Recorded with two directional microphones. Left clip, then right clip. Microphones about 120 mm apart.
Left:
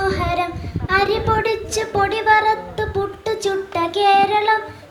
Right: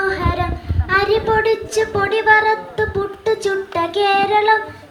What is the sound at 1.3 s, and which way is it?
Speech, 30° left (ahead or behind).